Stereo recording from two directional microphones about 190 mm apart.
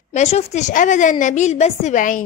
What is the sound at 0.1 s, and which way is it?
A woman's voice, 35° left (ahead or behind).